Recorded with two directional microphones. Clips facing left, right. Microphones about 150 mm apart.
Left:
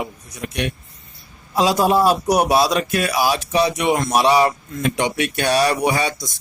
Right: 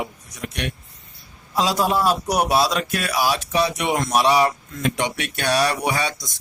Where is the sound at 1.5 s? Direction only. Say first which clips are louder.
Left 4 dB; 15° left (ahead or behind).